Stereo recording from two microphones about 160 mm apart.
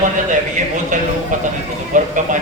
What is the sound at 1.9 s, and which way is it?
Speech, 55° right (ahead or behind).